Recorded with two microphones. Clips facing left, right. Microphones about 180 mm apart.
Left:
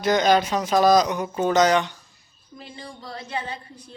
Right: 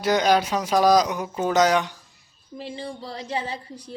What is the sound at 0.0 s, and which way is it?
Speech, 10° right (ahead or behind).